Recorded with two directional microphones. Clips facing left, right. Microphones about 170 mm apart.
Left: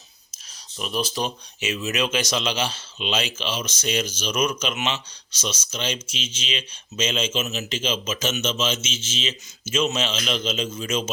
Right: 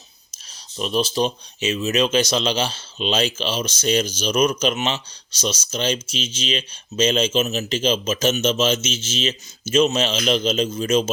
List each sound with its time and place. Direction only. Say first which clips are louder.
0.8 s speech: right 6 dB; 30° right (ahead or behind)